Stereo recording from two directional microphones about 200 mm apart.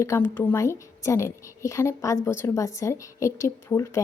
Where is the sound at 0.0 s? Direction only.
10° left (ahead or behind).